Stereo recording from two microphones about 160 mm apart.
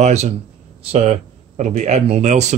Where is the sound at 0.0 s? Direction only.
45° right (ahead or behind).